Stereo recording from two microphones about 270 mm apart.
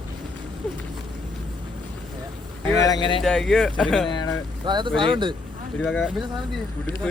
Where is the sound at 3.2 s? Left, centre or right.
Centre.